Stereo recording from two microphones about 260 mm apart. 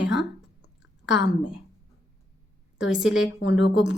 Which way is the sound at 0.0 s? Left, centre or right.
Left.